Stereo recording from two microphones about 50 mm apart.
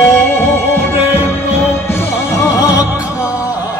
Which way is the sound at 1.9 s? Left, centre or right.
Left.